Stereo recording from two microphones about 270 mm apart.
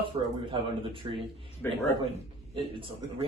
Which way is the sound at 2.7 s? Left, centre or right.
Centre.